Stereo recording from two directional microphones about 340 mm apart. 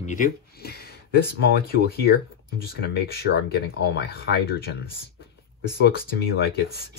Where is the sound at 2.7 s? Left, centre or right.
Left.